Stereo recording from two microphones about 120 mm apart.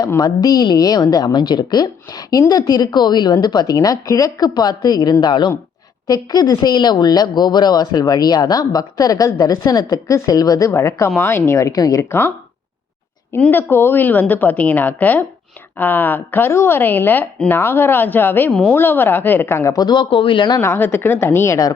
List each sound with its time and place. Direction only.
0.2 s a woman's voice: 35° left (ahead or behind)
13.4 s a woman's voice: 15° left (ahead or behind); by 20.6 s 40° left (ahead or behind)
20.6 s speech: 20° left (ahead or behind)